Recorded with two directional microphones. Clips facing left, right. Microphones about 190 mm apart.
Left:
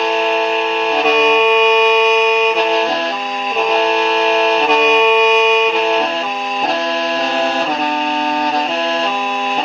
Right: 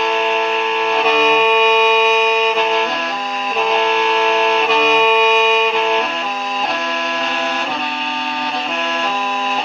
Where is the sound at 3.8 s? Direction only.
30° left (ahead or behind).